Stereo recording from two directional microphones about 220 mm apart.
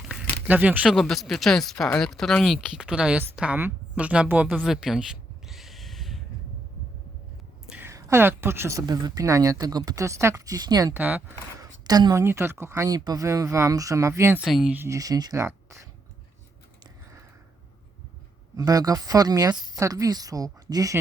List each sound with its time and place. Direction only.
0.4 s speech: 5° right (ahead or behind)
7.7 s speech: 10° right (ahead or behind)
18.5 s speech: 15° right (ahead or behind)